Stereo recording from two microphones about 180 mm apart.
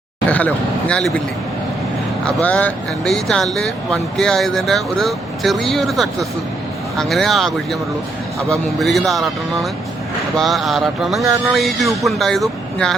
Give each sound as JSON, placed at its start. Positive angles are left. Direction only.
{"t": 0.3, "sound": "a man's voice", "side_deg": 10}
{"t": 2.2, "sound": "speech", "side_deg": 10}
{"t": 11.2, "sound": "speech", "side_deg": -15}
{"t": 11.5, "sound": "speech", "side_deg": 0}